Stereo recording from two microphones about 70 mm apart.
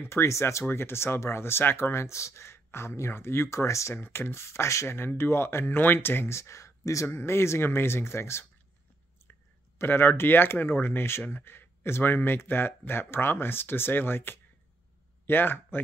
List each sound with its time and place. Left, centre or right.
0.0 s speech: left
3.9 s speech: left
7.1 s speech: left
9.8 s speech: left